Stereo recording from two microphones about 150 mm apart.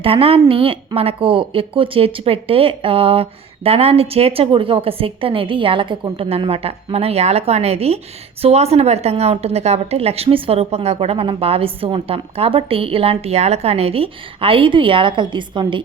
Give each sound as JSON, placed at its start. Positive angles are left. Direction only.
{"t": 0.0, "sound": "a woman's voice", "side_deg": -40}